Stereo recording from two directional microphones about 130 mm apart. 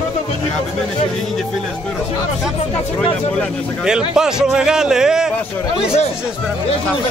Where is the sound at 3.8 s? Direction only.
5° right (ahead or behind).